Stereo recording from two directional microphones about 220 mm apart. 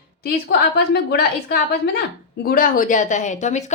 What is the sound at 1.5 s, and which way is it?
Speech, 45° left (ahead or behind).